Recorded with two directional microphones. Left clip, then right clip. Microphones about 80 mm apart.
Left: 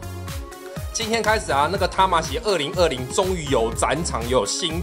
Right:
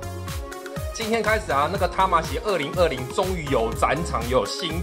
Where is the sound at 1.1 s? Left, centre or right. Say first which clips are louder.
Left 2 dB; left.